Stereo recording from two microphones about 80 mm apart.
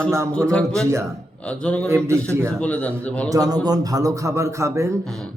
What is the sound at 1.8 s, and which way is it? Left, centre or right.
Speech, right.